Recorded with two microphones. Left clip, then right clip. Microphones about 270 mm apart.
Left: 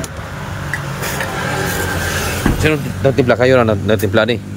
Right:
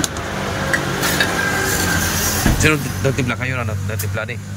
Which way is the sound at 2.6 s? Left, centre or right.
Centre.